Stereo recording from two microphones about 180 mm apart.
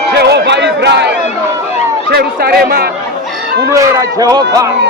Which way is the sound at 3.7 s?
20° right (ahead or behind).